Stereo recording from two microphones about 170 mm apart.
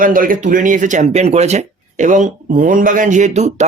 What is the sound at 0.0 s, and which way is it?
Speech, 55° right (ahead or behind).